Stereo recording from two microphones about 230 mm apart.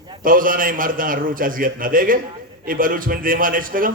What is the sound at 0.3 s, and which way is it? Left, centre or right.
A man's voice, right.